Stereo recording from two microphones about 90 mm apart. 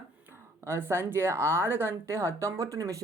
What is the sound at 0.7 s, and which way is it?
Speech, 25° right (ahead or behind).